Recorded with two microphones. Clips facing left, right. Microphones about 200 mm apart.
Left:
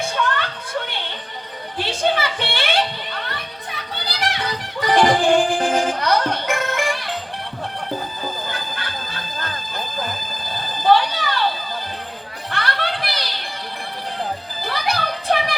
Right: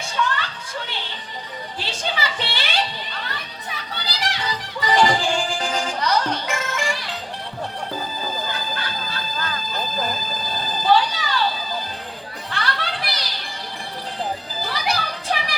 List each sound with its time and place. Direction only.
0.0 s music: 55° left (ahead or behind)
1.8 s a sound: 55° left (ahead or behind)
3.9 s music: 55° left (ahead or behind)
10.8 s a sound: 55° left (ahead or behind)
12.5 s music: 55° left (ahead or behind)
14.6 s music: 55° left (ahead or behind)